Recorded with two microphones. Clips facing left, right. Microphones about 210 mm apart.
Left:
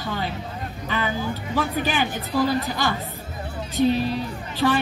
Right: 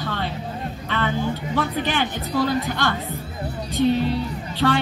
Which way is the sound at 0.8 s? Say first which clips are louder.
Right 2 dB; 5° left (ahead or behind).